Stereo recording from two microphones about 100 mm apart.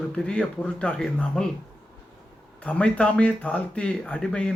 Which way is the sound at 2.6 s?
10° left (ahead or behind).